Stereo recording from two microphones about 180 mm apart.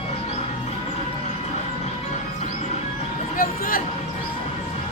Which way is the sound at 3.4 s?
50° left (ahead or behind).